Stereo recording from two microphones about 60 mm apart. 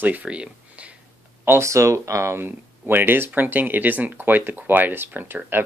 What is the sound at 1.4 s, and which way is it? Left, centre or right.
Speech, right.